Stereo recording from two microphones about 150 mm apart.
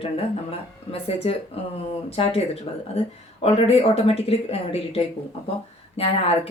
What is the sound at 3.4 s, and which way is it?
Speech, 45° left (ahead or behind).